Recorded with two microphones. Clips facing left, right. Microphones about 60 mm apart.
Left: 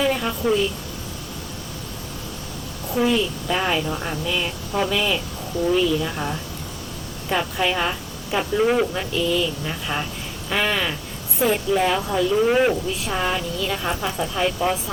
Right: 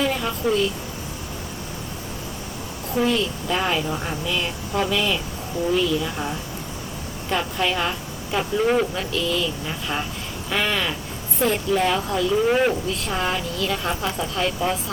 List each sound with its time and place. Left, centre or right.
0.0 s a woman's voice: centre
2.9 s speech: centre
10.5 s a sound: centre
11.3 s speech: centre